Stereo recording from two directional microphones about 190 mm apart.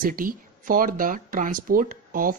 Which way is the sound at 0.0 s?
50° right (ahead or behind).